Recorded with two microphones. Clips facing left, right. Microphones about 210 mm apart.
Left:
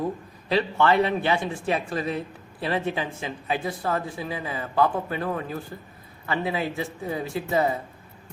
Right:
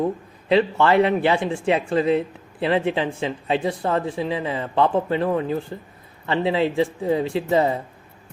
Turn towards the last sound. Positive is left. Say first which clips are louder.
# right 4 dB
turn(degrees=-25)  # may be behind; listen again after turning